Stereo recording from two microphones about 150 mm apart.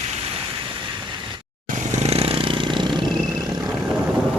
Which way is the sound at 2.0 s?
40° right (ahead or behind).